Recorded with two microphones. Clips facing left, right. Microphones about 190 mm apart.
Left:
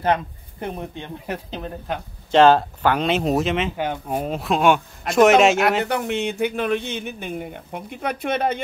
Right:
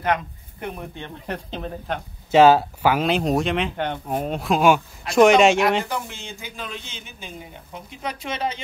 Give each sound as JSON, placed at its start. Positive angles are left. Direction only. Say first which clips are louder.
{"t": 0.0, "sound": "speech", "louder": "left 2 dB", "side_deg": 30}
{"t": 1.0, "sound": "speech", "louder": "left 1 dB", "side_deg": 5}
{"t": 5.9, "sound": "speech", "louder": "left 8 dB", "side_deg": 65}